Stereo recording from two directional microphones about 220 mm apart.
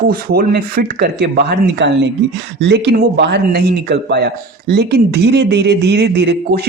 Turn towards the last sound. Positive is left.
turn(degrees=-50)  # may be behind; listen again after turning